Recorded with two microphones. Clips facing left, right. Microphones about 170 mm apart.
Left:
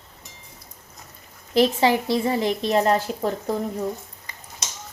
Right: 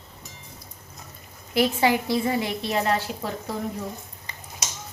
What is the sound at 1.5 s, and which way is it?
Speech, 30° left (ahead or behind).